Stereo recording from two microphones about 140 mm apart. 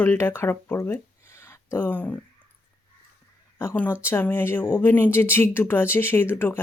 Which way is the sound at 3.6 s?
15° left (ahead or behind).